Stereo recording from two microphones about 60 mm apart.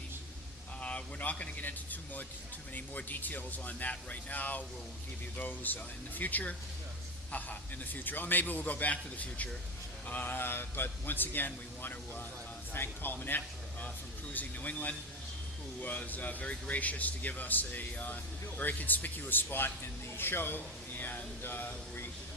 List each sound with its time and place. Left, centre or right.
0.8 s a man's voice: left
7.9 s a man's voice: left